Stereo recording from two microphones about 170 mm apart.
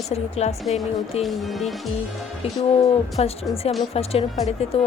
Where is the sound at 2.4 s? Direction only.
35° left (ahead or behind).